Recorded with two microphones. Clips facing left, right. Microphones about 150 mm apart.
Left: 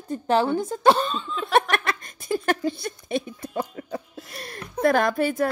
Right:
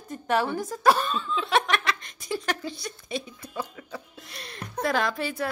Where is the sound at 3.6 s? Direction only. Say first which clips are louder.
Left 5 dB; 40° left (ahead or behind).